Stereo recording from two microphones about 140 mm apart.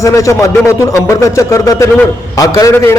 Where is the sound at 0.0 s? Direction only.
20° left (ahead or behind).